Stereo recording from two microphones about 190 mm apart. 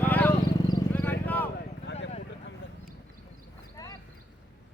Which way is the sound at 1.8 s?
65° left (ahead or behind).